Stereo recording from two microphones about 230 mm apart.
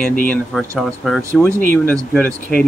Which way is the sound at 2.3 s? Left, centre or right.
Right.